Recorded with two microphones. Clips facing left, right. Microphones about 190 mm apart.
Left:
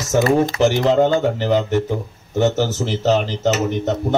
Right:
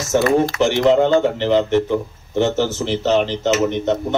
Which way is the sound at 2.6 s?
40° left (ahead or behind).